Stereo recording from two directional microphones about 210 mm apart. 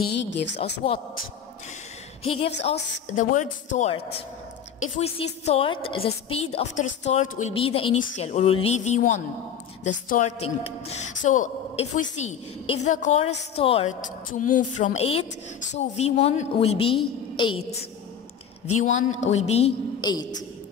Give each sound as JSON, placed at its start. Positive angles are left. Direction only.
{"t": 0.0, "sound": "a woman's voice", "side_deg": 55}
{"t": 0.8, "sound": "a woman's voice", "side_deg": 25}
{"t": 2.2, "sound": "a woman's voice", "side_deg": 25}
{"t": 3.2, "sound": "a woman's voice", "side_deg": 40}
{"t": 18.8, "sound": "a woman's voice", "side_deg": 35}
{"t": 20.0, "sound": "a woman's voice", "side_deg": 20}